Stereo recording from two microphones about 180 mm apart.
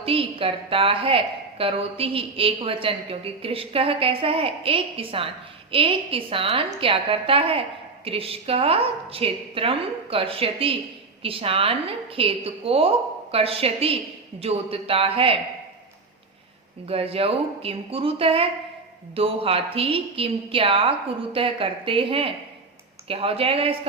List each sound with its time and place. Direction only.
0.0 s a woman's voice: 30° right (ahead or behind)
16.8 s a woman's voice: 35° right (ahead or behind)